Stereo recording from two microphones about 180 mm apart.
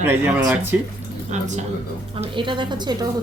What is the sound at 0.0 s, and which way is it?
Speech, 10° right (ahead or behind).